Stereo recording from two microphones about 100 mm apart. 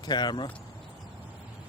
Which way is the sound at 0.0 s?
45° left (ahead or behind).